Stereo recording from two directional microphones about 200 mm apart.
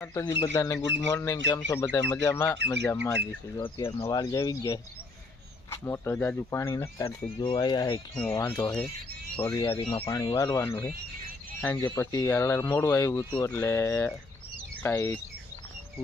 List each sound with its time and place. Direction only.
0.0 s speech: 15° left (ahead or behind)
8.1 s speech: 10° left (ahead or behind)